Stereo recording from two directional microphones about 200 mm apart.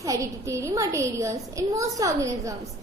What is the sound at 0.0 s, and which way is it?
A child's voice, 15° right (ahead or behind).